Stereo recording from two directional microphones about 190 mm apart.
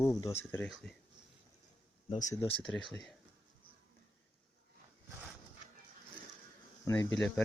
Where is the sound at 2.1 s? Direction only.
40° left (ahead or behind).